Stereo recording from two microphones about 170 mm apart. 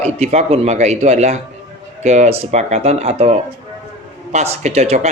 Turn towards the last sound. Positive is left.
turn(degrees=-40)  # may be behind; listen again after turning